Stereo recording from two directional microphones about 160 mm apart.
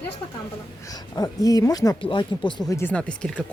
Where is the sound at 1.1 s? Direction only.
20° left (ahead or behind).